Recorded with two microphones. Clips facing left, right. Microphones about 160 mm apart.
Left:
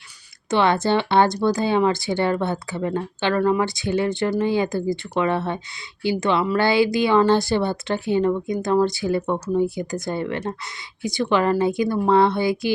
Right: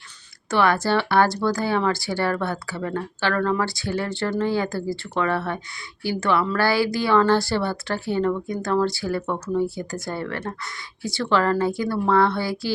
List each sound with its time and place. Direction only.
0.5 s a woman's voice: 20° left (ahead or behind)